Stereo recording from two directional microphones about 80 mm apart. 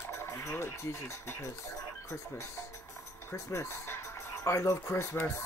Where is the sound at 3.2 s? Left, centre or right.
Left.